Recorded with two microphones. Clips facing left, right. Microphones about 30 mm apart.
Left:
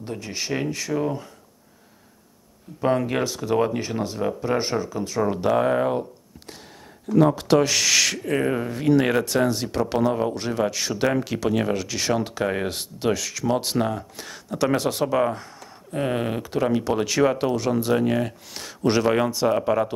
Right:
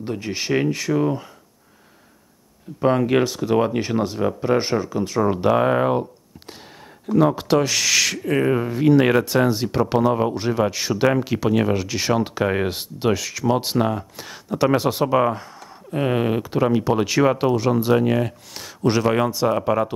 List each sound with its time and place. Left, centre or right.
0.0 s speech: centre
2.8 s speech: centre